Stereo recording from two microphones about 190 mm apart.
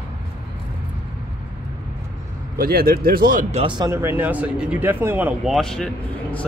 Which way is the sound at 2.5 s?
50° right (ahead or behind).